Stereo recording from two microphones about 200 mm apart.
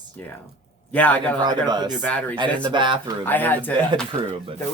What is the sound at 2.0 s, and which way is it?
Speech, 5° left (ahead or behind).